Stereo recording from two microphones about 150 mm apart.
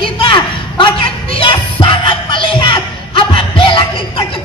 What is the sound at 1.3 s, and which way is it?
Music, 35° left (ahead or behind).